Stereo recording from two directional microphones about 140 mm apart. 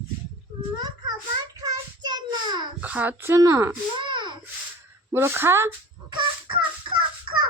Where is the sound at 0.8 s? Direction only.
30° right (ahead or behind).